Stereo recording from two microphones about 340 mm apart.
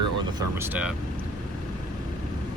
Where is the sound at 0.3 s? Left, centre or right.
Centre.